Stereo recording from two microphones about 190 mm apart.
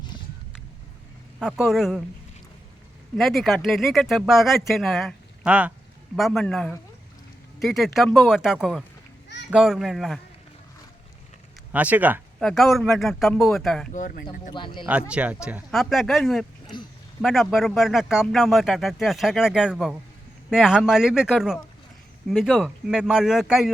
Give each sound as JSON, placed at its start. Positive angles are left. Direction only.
{"t": 1.4, "sound": "speech", "side_deg": 0}
{"t": 3.2, "sound": "speech", "side_deg": 0}
{"t": 11.7, "sound": "speech", "side_deg": -10}
{"t": 12.4, "sound": "speech", "side_deg": 0}
{"t": 13.9, "sound": "speech", "side_deg": 45}
{"t": 14.5, "sound": "speech", "side_deg": 25}
{"t": 15.1, "sound": "speech", "side_deg": -5}